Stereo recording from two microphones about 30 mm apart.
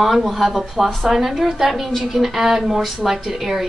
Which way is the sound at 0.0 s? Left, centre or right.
Centre.